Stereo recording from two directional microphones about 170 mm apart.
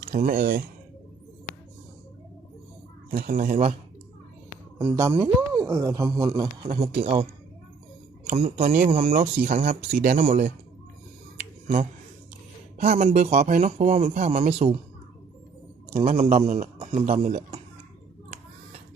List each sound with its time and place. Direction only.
0.2 s speech: 55° right (ahead or behind)
3.1 s speech: 55° right (ahead or behind)
4.8 s a man's voice: 15° right (ahead or behind); by 7.3 s 35° right (ahead or behind)
8.2 s speech: 50° right (ahead or behind)
12.8 s a man's voice: 40° right (ahead or behind)
16.0 s speech: 45° right (ahead or behind)